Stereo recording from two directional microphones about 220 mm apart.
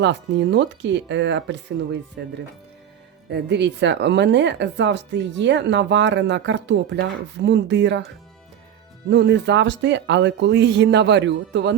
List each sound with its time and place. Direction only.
0.0 s speech: 50° right (ahead or behind)
3.2 s speech: 50° right (ahead or behind)
9.0 s speech: 50° right (ahead or behind)